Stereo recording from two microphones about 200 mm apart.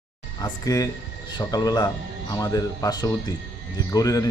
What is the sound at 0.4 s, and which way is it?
Speech, 20° left (ahead or behind).